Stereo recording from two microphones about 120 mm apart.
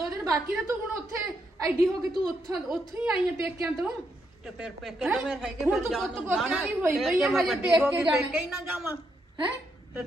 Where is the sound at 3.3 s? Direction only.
25° right (ahead or behind).